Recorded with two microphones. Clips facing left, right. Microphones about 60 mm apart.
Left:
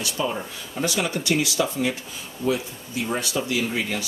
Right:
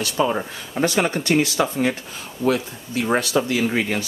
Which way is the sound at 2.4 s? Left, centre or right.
Right.